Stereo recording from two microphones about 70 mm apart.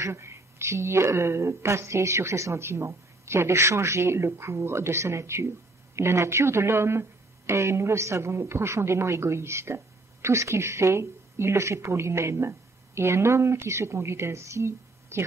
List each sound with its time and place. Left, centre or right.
0.0 s a woman's voice: right